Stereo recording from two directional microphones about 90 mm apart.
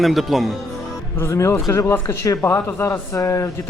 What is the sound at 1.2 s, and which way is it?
Speech, 35° left (ahead or behind).